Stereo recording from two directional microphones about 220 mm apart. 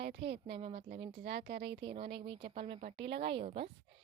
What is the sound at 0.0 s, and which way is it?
Speech, 50° right (ahead or behind).